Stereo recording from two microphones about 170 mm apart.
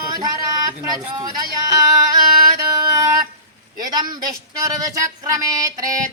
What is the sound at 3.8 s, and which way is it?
Speech, 25° right (ahead or behind).